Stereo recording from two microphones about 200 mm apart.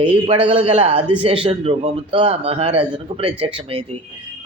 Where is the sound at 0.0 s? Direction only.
25° right (ahead or behind).